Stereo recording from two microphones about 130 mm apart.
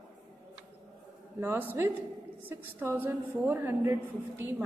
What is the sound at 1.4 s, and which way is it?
A woman's voice, 20° right (ahead or behind).